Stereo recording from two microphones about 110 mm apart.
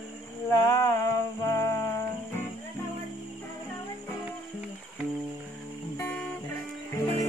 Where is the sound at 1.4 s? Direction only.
30° left (ahead or behind).